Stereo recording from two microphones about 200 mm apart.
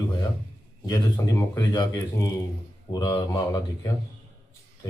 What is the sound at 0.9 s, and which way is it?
Speech, 20° left (ahead or behind).